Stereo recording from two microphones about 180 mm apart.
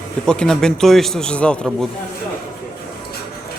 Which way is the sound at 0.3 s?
5° left (ahead or behind).